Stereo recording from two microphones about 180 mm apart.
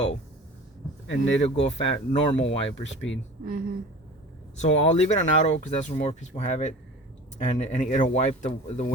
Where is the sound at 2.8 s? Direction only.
90° left.